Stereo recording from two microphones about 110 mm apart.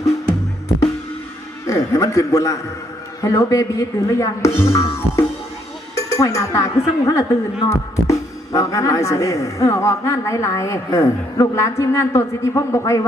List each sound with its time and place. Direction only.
1.6 s a man's voice: 30° left (ahead or behind)